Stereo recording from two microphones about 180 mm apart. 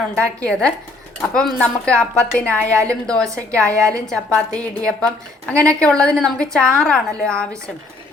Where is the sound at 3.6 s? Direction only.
15° right (ahead or behind).